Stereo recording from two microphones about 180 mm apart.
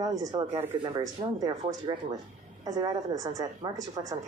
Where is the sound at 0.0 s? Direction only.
20° right (ahead or behind).